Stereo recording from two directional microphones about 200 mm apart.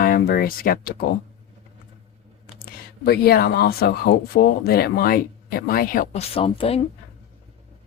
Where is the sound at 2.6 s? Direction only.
50° left (ahead or behind); by 6.8 s 30° left (ahead or behind).